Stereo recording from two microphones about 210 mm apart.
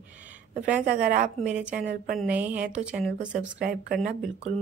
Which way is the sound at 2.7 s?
5° right (ahead or behind).